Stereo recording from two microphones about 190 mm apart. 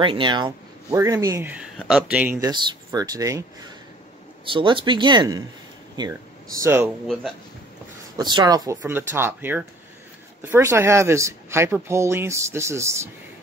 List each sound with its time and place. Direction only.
0.0 s speech: 25° right (ahead or behind)
4.5 s speech: 25° right (ahead or behind)
8.2 s speech: 20° right (ahead or behind)